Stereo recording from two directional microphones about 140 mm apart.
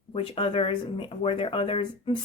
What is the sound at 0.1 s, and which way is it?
Speech, 40° left (ahead or behind).